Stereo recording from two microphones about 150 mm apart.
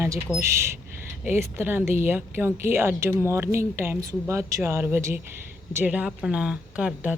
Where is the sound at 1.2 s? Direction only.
15° right (ahead or behind).